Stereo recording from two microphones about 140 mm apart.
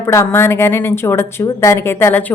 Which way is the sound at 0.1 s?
20° left (ahead or behind).